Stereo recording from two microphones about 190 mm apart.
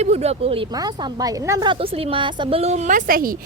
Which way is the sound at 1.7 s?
30° right (ahead or behind).